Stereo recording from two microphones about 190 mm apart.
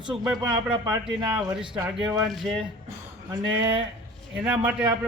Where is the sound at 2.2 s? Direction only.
Centre (ahead or behind).